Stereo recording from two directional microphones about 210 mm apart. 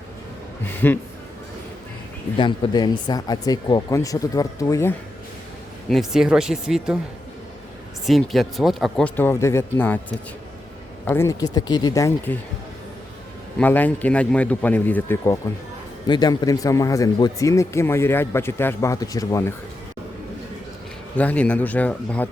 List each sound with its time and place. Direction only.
0.8 s speech: 10° left (ahead or behind)
2.4 s speech: 20° left (ahead or behind)
5.9 s speech: centre (ahead or behind)
8.0 s speech: centre (ahead or behind)
11.0 s speech: 10° left (ahead or behind)
13.6 s speech: 10° left (ahead or behind)
21.2 s speech: 5° left (ahead or behind)